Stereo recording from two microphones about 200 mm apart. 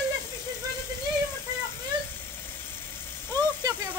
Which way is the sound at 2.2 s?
10° left (ahead or behind).